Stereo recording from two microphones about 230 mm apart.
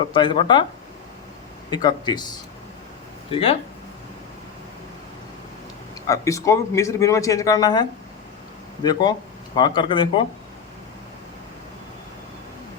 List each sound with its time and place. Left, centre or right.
0.1 s speech: left
1.7 s speech: centre
6.1 s speech: centre